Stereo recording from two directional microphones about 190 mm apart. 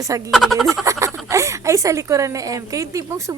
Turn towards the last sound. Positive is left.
turn(degrees=-15)  # may be behind; listen again after turning